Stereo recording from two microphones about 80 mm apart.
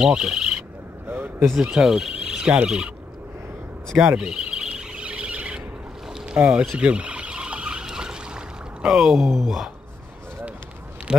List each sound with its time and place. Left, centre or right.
0.0 s speech: centre
1.0 s a sound: right
1.5 s speech: centre
4.0 s chirp: centre
6.3 s speech: centre
6.8 s a sound: centre
11.1 s speech: centre